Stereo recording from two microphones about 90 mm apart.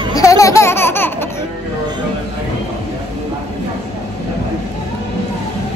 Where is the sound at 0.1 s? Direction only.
40° left (ahead or behind).